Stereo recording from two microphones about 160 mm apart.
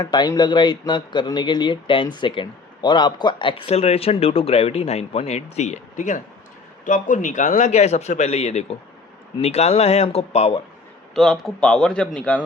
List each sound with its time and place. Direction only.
0.0 s a man's voice: 25° left (ahead or behind); by 10.6 s 40° left (ahead or behind)
11.1 s a man's voice: centre (ahead or behind)